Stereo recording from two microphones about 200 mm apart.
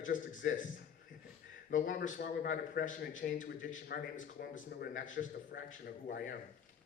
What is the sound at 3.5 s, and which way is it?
Speech, 55° left (ahead or behind).